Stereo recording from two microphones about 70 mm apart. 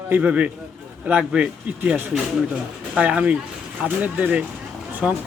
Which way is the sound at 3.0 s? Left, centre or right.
Centre.